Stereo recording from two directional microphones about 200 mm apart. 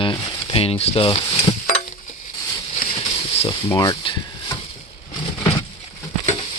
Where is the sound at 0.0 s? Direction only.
25° left (ahead or behind).